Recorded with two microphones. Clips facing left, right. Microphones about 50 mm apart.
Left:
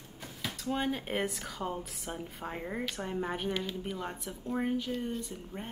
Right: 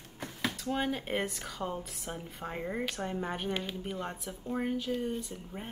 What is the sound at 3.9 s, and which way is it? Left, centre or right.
A woman's voice, centre.